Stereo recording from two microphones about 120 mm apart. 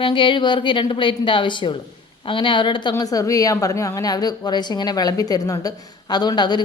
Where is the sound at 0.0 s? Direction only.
45° left (ahead or behind).